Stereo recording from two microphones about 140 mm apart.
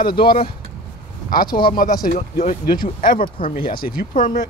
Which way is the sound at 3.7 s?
90° left.